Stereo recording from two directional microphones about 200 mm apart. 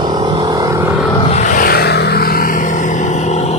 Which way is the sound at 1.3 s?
40° left (ahead or behind).